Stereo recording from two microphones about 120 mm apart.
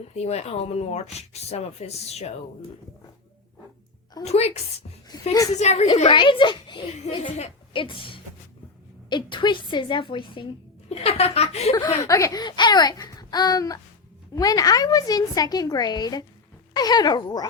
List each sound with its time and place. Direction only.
0.1 s speech: 60° left (ahead or behind)
4.3 s speech: 60° left (ahead or behind)
5.1 s a woman's voice: 35° left (ahead or behind)
5.5 s a woman's voice: 70° left (ahead or behind)
6.1 s a child's voice: 45° left (ahead or behind)
7.1 s a woman's voice: 70° left (ahead or behind)
7.7 s a child's voice: 45° left (ahead or behind)
10.8 s speech: 60° left (ahead or behind)
12.0 s a woman's voice: 25° left (ahead or behind)